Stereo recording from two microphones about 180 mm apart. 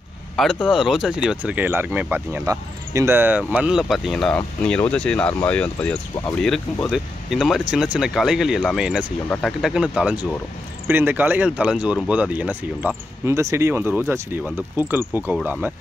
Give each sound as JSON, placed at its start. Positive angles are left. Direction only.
{"t": 0.7, "sound": "speech", "side_deg": -5}